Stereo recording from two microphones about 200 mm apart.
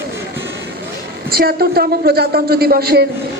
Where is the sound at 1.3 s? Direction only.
50° right (ahead or behind).